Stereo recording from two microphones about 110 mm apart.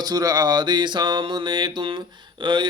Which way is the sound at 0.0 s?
35° right (ahead or behind).